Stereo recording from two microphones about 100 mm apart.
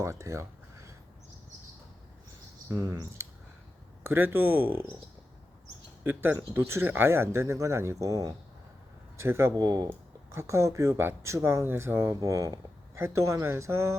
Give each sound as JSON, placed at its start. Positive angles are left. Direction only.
{"t": 0.0, "sound": "a sound", "side_deg": -30}
{"t": 2.6, "sound": "speech", "side_deg": -30}
{"t": 6.0, "sound": "speech", "side_deg": -20}
{"t": 9.6, "sound": "speech", "side_deg": -40}